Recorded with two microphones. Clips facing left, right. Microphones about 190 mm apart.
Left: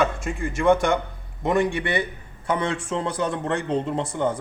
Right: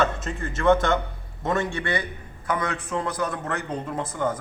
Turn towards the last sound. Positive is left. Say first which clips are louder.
# left 3 dB
turn(degrees=25)  # may be behind; listen again after turning